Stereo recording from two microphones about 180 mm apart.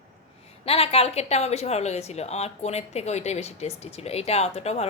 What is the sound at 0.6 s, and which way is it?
Speech, 35° left (ahead or behind).